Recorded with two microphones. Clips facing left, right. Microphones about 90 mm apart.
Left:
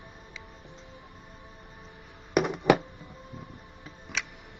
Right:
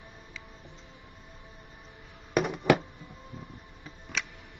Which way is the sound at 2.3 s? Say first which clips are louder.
Left 2 dB; 15° left (ahead or behind).